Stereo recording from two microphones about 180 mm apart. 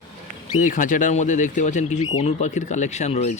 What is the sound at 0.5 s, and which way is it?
Speech, 45° left (ahead or behind).